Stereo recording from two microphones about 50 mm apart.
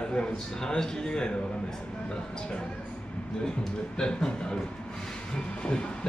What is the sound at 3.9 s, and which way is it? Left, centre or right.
Speech, centre.